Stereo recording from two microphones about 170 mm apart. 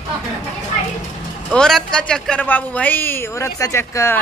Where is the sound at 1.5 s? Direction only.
5° left (ahead or behind).